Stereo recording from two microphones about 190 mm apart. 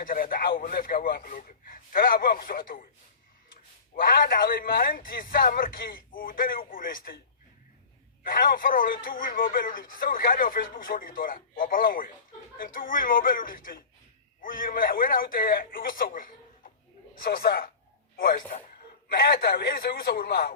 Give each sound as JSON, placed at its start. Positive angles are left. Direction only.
{"t": 0.0, "sound": "speech", "side_deg": 50}
{"t": 3.9, "sound": "speech", "side_deg": 50}
{"t": 8.2, "sound": "a man's voice", "side_deg": 50}